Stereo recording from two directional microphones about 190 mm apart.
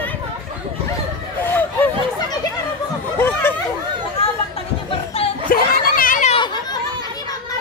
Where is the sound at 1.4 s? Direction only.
10° left (ahead or behind).